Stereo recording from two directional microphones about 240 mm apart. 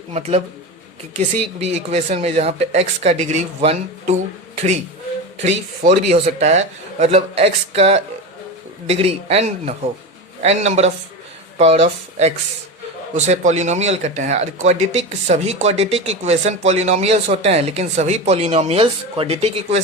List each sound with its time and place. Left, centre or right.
0.1 s speech: right
1.5 s speech: right
5.4 s speech: right